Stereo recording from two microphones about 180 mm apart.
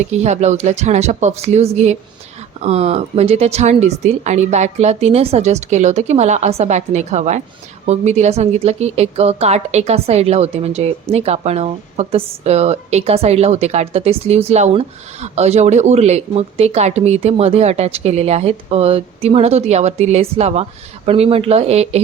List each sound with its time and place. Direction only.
0.0 s a woman's voice: 40° right (ahead or behind)